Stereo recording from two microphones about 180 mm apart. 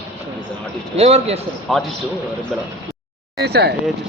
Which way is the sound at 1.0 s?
35° right (ahead or behind).